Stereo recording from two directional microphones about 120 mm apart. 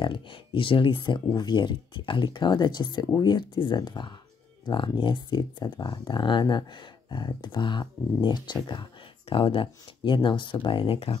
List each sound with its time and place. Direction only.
0.0 s speech: 45° left (ahead or behind)